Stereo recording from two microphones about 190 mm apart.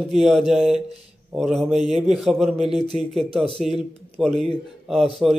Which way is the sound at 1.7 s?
35° right (ahead or behind).